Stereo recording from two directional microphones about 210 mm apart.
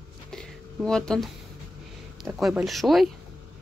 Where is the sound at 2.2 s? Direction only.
Centre (ahead or behind).